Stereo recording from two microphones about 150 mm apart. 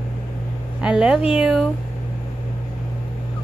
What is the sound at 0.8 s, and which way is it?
Music, 5° right (ahead or behind).